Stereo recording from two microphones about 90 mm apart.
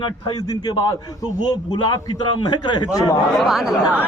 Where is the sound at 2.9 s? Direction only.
40° left (ahead or behind).